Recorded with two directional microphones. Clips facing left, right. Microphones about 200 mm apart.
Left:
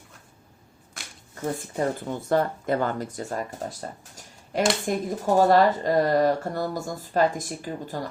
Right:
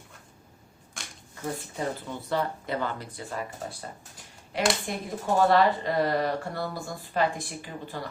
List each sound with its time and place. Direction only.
1.5 s speech: 50° left (ahead or behind)